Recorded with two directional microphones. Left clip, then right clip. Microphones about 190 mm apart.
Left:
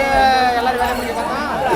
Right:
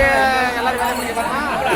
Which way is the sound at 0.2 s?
60° left (ahead or behind).